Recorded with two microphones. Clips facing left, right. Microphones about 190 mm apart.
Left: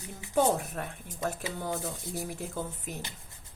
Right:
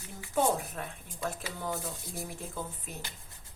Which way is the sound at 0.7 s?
45° left (ahead or behind).